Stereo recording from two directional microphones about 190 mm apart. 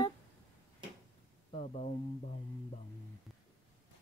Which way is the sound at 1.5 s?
35° left (ahead or behind).